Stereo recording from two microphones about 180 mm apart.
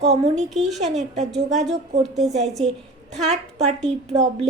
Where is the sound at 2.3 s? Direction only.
40° right (ahead or behind).